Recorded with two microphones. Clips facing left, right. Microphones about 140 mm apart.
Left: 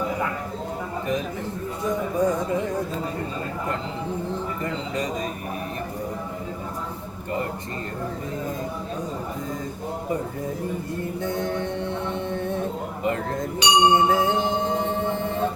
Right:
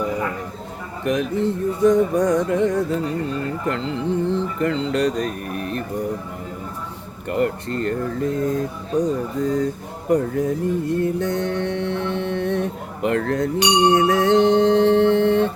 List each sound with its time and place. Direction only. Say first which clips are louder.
1.0 s speech: right 10 dB; 70° right (ahead or behind)
7.3 s speech: right 8 dB; 70° right (ahead or behind)
10.1 s mantra: right 11 dB; 75° right (ahead or behind)